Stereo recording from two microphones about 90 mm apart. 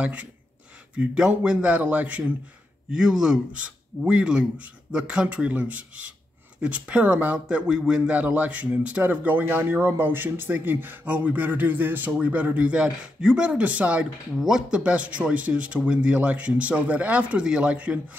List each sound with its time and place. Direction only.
0.0 s speech: 10° right (ahead or behind)